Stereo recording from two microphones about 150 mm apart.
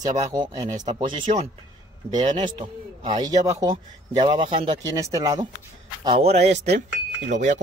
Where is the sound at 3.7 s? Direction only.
35° right (ahead or behind).